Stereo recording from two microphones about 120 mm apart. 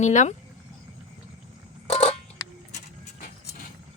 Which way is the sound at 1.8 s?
70° left (ahead or behind).